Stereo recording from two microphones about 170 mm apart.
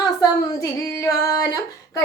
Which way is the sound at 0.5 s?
15° left (ahead or behind).